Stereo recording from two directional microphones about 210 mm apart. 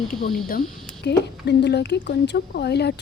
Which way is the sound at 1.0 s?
55° left (ahead or behind).